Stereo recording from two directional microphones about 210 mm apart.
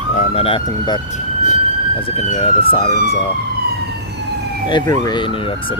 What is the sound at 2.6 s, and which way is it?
Speech, 25° left (ahead or behind).